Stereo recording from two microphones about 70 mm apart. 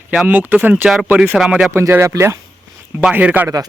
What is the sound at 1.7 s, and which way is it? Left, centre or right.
Speech, right.